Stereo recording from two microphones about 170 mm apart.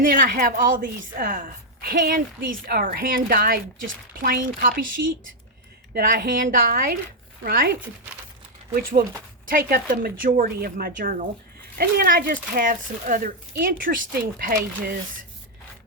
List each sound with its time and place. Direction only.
0.0 s a woman's voice: 55° right (ahead or behind)
5.0 s a woman's voice: 70° right (ahead or behind)